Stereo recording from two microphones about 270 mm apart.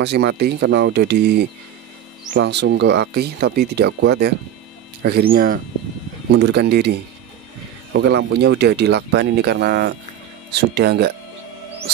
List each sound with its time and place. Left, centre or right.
0.0 s speech: right